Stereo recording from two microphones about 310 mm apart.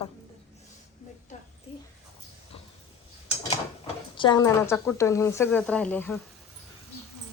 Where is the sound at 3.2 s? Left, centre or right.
Centre.